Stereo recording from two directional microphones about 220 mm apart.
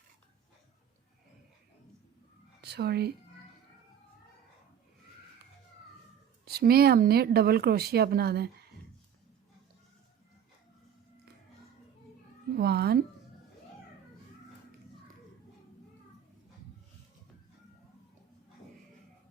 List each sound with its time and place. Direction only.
2.6 s a woman's voice: 50° right (ahead or behind)
6.4 s speech: 45° right (ahead or behind)
12.5 s cat: 45° right (ahead or behind)